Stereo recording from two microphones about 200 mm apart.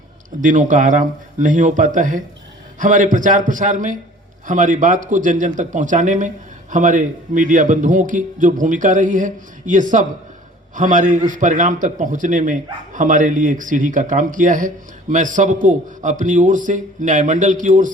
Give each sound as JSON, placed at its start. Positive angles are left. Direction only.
{"t": 0.4, "sound": "speech", "side_deg": -40}